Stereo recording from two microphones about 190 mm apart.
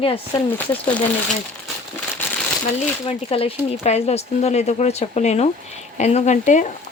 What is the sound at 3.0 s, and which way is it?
A woman's voice, 30° left (ahead or behind).